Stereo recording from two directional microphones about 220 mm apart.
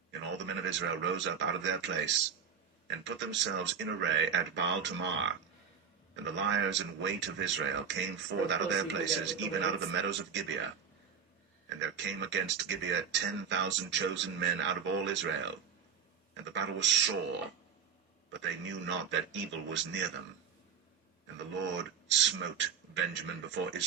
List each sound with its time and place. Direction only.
0.1 s speech: 55° right (ahead or behind)
11.8 s speech: 55° right (ahead or behind)
18.3 s speech: 55° right (ahead or behind)
21.3 s speech: 55° right (ahead or behind)